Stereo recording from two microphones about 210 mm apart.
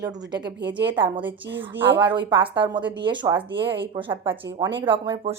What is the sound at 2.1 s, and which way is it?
A woman's voice, 25° right (ahead or behind).